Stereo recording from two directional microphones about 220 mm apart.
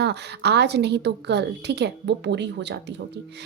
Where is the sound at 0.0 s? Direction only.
50° right (ahead or behind).